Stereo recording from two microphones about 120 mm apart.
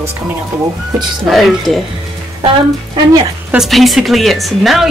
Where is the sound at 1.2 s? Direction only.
Centre (ahead or behind).